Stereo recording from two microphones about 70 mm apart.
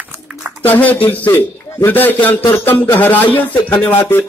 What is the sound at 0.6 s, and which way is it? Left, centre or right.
A man's voice, left.